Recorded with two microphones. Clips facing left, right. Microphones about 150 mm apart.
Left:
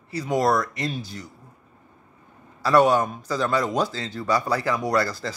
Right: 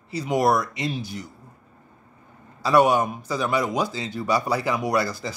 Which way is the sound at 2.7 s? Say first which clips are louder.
Even; 15° right (ahead or behind).